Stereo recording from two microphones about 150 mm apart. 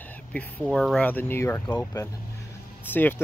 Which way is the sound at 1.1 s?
15° left (ahead or behind).